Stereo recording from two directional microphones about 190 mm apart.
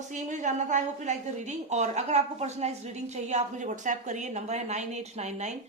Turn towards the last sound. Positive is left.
turn(degrees=-35)  # may be behind; listen again after turning